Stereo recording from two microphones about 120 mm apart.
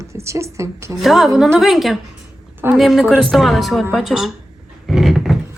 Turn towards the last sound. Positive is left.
turn(degrees=0)  # may be behind; listen again after turning